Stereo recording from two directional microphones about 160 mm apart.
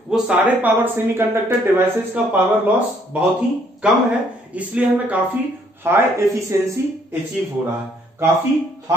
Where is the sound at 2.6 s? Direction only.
5° right (ahead or behind).